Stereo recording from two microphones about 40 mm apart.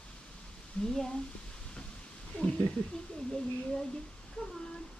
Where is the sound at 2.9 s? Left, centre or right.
Left.